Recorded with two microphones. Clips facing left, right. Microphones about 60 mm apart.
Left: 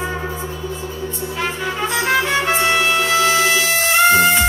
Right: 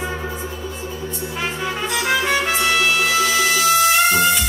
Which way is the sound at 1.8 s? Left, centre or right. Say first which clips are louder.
Left 2 dB; left.